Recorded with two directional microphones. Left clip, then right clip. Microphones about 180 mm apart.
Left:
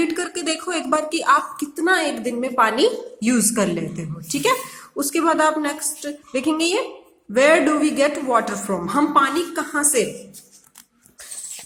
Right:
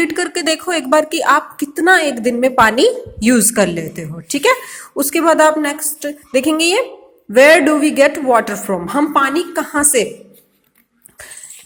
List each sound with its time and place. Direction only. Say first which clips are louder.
0.0 s a woman's voice: right 6 dB; 30° right (ahead or behind)